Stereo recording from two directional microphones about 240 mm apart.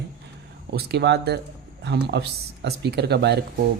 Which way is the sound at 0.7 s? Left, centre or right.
Right.